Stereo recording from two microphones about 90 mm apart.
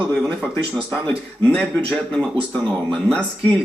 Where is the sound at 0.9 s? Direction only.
10° left (ahead or behind).